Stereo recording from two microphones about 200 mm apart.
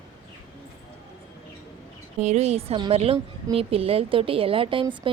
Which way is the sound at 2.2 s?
35° right (ahead or behind).